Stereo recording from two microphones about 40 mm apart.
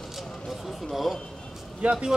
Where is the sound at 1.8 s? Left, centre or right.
Right.